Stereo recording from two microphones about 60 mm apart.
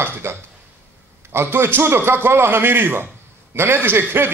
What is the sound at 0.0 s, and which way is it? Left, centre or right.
A man's voice, right.